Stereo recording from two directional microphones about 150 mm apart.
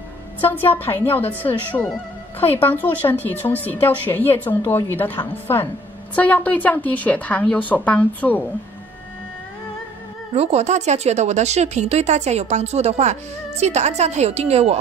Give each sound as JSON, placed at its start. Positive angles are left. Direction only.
{"t": 0.4, "sound": "a woman's voice", "side_deg": 15}
{"t": 10.3, "sound": "speech", "side_deg": -45}